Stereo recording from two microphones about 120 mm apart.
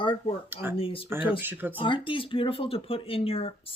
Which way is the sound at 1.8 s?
45° left (ahead or behind).